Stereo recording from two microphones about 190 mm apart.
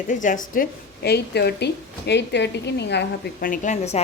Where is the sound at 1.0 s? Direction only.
60° left (ahead or behind).